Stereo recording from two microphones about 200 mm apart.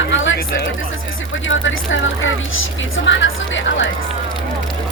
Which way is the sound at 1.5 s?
70° left (ahead or behind).